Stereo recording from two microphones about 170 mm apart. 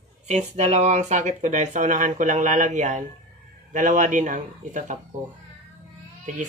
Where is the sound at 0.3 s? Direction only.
40° right (ahead or behind).